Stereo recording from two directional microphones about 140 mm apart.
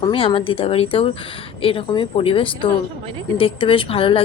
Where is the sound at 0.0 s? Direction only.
40° left (ahead or behind).